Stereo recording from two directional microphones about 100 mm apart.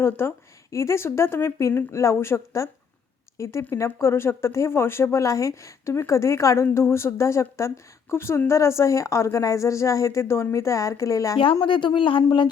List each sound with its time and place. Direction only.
0.0 s speech: 25° left (ahead or behind)
11.6 s speech: 50° left (ahead or behind)